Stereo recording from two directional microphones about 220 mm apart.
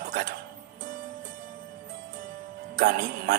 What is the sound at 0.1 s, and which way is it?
Music, 40° right (ahead or behind).